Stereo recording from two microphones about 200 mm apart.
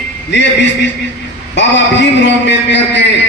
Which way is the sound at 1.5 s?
60° left (ahead or behind).